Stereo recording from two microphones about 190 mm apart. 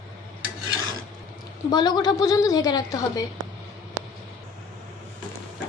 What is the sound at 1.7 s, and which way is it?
A woman's voice, 20° left (ahead or behind).